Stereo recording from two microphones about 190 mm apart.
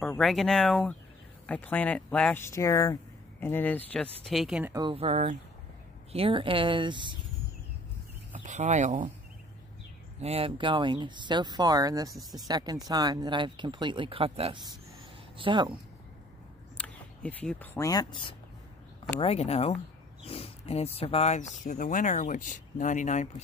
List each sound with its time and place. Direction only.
0.2 s speech: centre (ahead or behind)
4.7 s speech: 30° right (ahead or behind)
8.3 s speech: 40° right (ahead or behind)
10.2 s speech: 30° right (ahead or behind)
12.2 s speech: centre (ahead or behind)
12.4 s speech: 20° right (ahead or behind)
16.7 s speech: 5° left (ahead or behind); by 23.4 s 40° left (ahead or behind)